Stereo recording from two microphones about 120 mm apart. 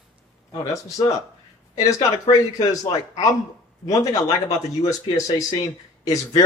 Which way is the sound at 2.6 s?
30° left (ahead or behind).